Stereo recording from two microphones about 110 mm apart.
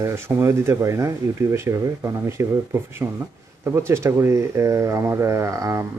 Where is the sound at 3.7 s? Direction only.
25° right (ahead or behind).